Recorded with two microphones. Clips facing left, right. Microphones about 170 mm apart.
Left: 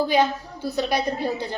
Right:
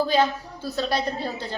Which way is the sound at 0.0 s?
15° left (ahead or behind).